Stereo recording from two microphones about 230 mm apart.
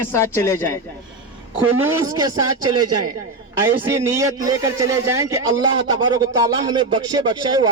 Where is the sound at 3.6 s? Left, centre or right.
Centre.